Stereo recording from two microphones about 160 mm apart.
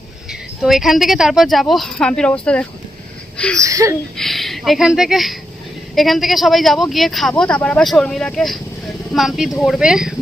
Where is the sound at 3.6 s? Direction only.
20° right (ahead or behind).